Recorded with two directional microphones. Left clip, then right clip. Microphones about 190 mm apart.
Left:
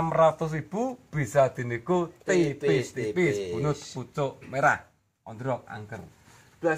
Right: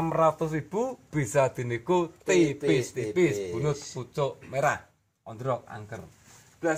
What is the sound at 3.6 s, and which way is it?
A man's voice, 30° right (ahead or behind).